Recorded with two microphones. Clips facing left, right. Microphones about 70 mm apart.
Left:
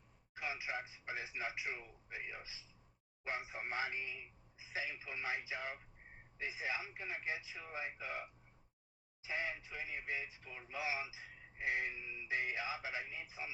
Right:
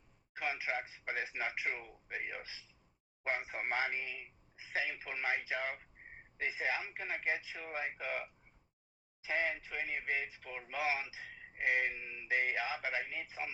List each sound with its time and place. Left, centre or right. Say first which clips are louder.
0.3 s speech: right 5 dB; right